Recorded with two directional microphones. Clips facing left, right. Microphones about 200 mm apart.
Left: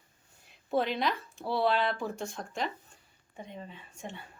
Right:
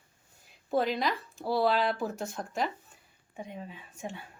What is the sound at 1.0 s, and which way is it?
A woman's voice, centre (ahead or behind).